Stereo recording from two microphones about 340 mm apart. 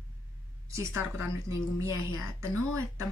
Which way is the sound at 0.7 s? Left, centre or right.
Centre.